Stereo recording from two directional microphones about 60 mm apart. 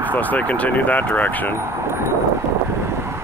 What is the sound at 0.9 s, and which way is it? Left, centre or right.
Speech, left.